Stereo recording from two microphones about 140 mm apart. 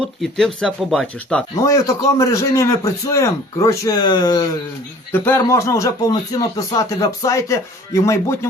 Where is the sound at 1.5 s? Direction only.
25° left (ahead or behind).